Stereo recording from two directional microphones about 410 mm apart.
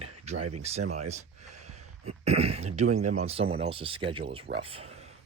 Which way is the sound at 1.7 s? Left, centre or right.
Right.